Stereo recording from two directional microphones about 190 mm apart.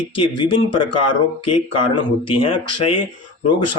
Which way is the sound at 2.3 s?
30° left (ahead or behind).